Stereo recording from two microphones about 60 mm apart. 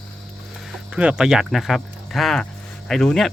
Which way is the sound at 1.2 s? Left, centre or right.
Centre.